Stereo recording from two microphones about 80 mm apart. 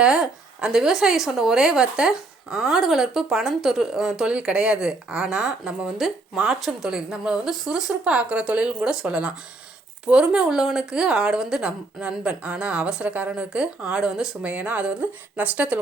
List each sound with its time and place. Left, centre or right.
0.0 s a woman's voice: centre